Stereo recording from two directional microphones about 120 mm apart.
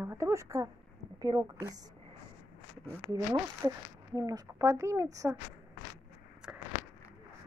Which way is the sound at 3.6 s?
20° right (ahead or behind).